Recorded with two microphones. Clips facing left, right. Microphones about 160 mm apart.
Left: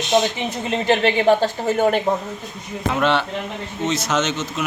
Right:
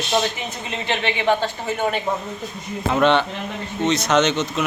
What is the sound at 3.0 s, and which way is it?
Speech, 5° left (ahead or behind).